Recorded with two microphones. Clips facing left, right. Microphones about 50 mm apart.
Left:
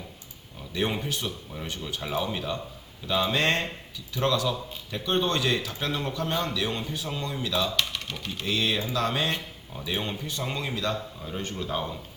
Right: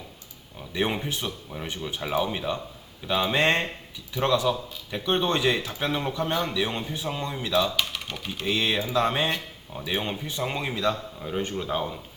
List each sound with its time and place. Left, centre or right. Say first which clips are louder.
0.7 s a man's voice: right 1 dB; centre